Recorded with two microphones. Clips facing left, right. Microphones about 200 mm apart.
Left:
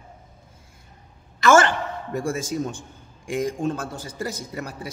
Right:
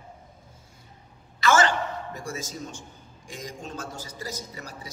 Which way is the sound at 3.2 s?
55° left (ahead or behind).